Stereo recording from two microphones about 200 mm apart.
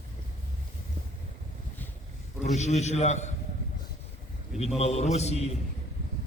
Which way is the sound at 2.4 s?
35° left (ahead or behind).